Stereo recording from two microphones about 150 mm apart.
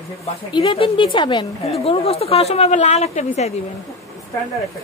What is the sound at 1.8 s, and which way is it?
A woman's voice, 40° left (ahead or behind).